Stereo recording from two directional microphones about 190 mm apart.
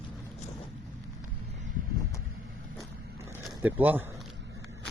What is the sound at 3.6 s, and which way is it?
Speech, 10° right (ahead or behind).